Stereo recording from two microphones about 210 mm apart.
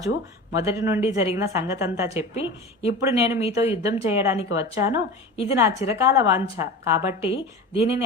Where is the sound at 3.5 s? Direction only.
30° left (ahead or behind).